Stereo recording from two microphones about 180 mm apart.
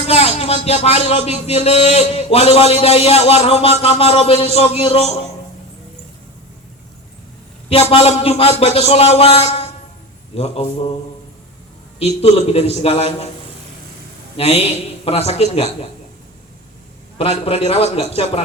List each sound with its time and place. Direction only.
0.1 s speech: 35° left (ahead or behind)
7.7 s speech: 35° left (ahead or behind)
11.9 s speech: 35° left (ahead or behind)
14.3 s speech: 35° left (ahead or behind)
17.2 s speech: 35° left (ahead or behind)